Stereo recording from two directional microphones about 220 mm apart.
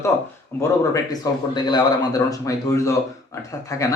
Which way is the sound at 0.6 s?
15° left (ahead or behind).